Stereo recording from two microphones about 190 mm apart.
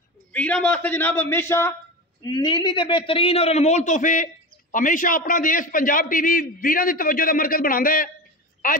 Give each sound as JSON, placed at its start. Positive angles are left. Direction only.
{"t": 0.3, "sound": "a man's voice", "side_deg": 5}
{"t": 2.2, "sound": "a man's voice", "side_deg": 25}